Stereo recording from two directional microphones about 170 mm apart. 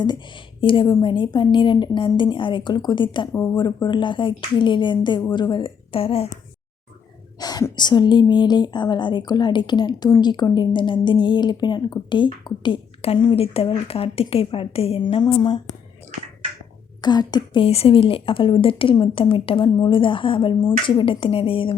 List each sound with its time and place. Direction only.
0.6 s a woman's voice: 30° left (ahead or behind)
3.3 s speech: 15° left (ahead or behind)
3.8 s a woman's voice: 30° left (ahead or behind)
7.3 s a woman's voice: 25° left (ahead or behind)
17.0 s a woman's voice: 25° left (ahead or behind)